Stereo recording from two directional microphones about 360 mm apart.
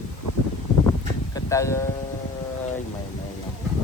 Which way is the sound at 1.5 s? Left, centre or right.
Centre.